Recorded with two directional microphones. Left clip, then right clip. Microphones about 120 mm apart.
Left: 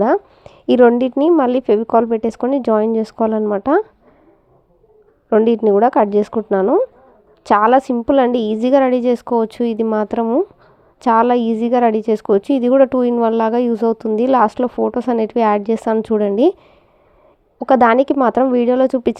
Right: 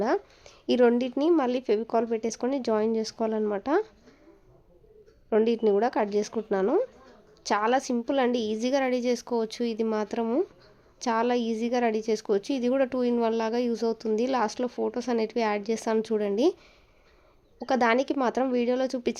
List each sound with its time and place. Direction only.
0.0 s a woman's voice: 35° left (ahead or behind)
5.3 s a woman's voice: 35° left (ahead or behind)
17.6 s a woman's voice: 35° left (ahead or behind)